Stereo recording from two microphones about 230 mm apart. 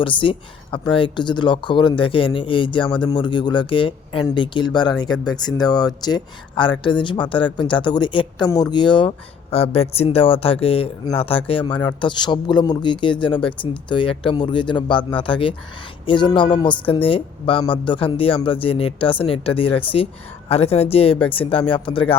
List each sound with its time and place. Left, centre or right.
0.0 s speech: left